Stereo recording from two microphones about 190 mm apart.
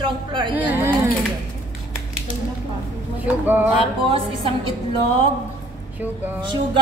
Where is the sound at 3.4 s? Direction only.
10° right (ahead or behind).